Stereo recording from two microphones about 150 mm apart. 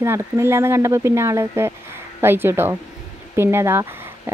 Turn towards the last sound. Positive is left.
turn(degrees=-20)  # may be behind; listen again after turning